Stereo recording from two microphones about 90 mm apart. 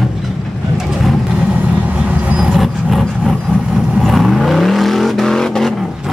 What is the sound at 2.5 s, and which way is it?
Vehicle, centre (ahead or behind).